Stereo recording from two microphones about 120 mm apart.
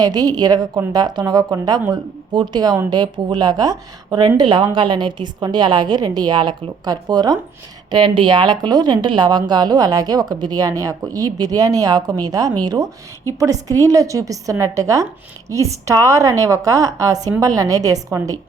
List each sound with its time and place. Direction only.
0.0 s a woman's voice: 35° right (ahead or behind)